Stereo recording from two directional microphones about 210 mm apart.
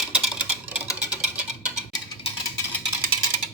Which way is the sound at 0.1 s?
5° right (ahead or behind).